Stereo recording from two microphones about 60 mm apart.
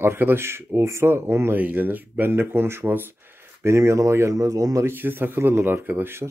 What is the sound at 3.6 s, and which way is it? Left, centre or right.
Speech, right.